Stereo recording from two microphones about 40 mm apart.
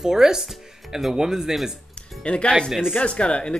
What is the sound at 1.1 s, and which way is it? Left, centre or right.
Speech, centre.